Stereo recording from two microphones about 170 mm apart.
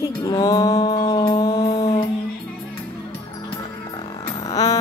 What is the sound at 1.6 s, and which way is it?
Music, 40° left (ahead or behind).